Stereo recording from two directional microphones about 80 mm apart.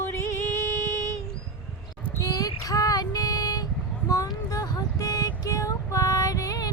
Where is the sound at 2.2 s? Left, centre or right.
Left.